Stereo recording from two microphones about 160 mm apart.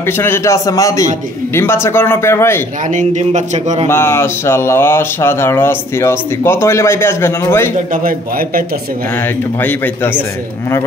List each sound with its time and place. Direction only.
0.0 s a man's voice: 15° left (ahead or behind)
2.9 s speech: 50° right (ahead or behind)
3.8 s speech: 15° left (ahead or behind)
7.9 s a man's voice: 60° right (ahead or behind)
9.6 s speech: 10° left (ahead or behind)